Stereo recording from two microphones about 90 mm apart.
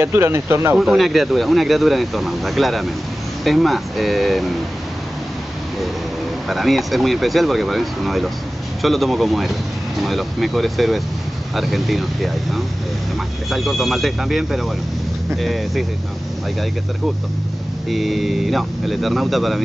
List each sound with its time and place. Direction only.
0.0 s speech: 30° right (ahead or behind)
0.7 s speech: 5° right (ahead or behind)
6.5 s speech: centre (ahead or behind)
17.8 s speech: centre (ahead or behind)